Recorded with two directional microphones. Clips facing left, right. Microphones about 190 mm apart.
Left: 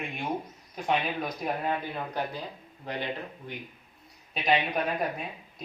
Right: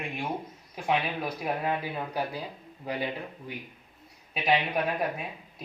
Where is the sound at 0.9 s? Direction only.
5° right (ahead or behind).